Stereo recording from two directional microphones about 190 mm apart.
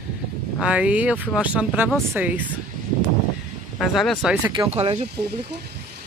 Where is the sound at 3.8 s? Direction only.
Centre (ahead or behind).